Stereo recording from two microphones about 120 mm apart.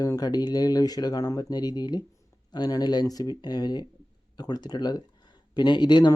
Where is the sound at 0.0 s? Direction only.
30° left (ahead or behind).